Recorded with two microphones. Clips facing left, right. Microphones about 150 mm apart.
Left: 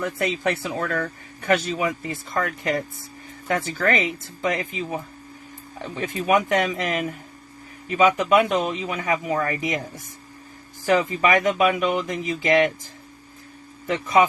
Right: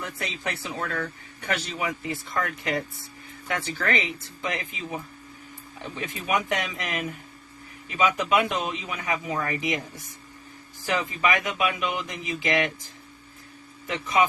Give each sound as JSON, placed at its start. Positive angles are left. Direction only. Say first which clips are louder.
{"t": 0.2, "sound": "speech", "louder": "left 10 dB", "side_deg": 50}
{"t": 6.0, "sound": "speech", "louder": "left 7 dB", "side_deg": 45}
{"t": 10.8, "sound": "speech", "louder": "left 6 dB", "side_deg": 50}
{"t": 13.8, "sound": "speech", "louder": "left 5 dB", "side_deg": 50}